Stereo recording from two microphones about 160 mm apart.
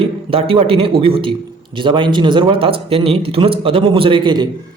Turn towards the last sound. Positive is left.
turn(degrees=-30)  # may be behind; listen again after turning